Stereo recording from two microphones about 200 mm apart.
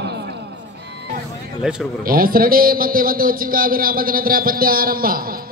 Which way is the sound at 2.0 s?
45° right (ahead or behind).